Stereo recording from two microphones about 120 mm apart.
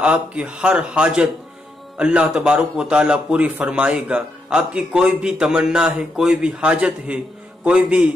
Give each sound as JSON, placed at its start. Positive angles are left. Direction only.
{"t": 0.0, "sound": "a man's voice", "side_deg": -10}